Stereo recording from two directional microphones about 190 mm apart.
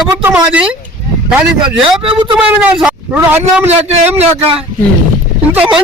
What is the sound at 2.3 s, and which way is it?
Speech, 5° right (ahead or behind).